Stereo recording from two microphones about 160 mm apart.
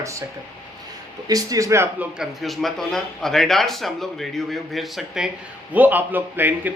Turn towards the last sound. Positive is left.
turn(degrees=-10)  # may be behind; listen again after turning